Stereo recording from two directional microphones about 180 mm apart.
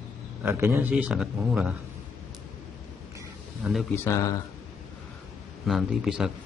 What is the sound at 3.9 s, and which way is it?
Speech, 15° left (ahead or behind).